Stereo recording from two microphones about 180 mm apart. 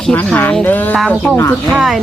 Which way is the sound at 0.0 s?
5° left (ahead or behind).